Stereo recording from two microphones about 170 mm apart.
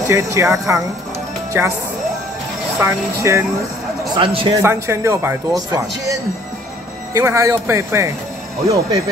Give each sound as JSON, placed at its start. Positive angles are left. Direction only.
{"t": 0.0, "sound": "speech", "side_deg": -15}
{"t": 2.8, "sound": "speech", "side_deg": -15}
{"t": 4.2, "sound": "speech", "side_deg": -30}
{"t": 4.6, "sound": "speech", "side_deg": -15}
{"t": 7.2, "sound": "speech", "side_deg": -15}